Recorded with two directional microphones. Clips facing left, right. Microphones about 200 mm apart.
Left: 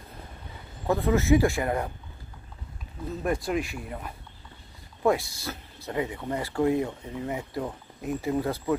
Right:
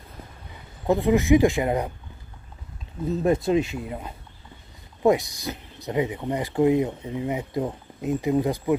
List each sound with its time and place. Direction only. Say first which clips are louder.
0.8 s speech: right 3 dB; 15° right (ahead or behind)
3.3 s speech: right 6 dB; 25° right (ahead or behind)